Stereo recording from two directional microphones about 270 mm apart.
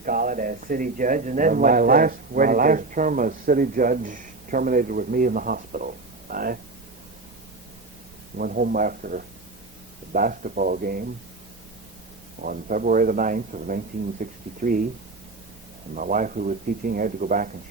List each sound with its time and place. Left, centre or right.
0.0 s speech: right
8.4 s speech: right
12.4 s speech: right
16.0 s speech: right